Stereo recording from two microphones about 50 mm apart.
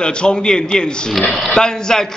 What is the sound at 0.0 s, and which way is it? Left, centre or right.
Speech, centre.